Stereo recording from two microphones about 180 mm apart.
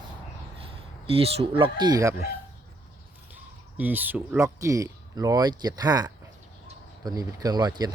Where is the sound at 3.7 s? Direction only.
10° right (ahead or behind).